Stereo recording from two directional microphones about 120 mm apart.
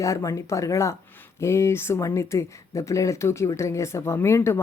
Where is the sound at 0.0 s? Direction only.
25° left (ahead or behind).